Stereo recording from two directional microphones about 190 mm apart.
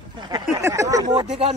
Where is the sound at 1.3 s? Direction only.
35° right (ahead or behind).